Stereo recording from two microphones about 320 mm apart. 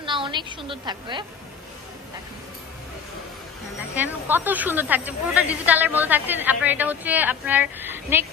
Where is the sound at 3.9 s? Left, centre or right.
Centre.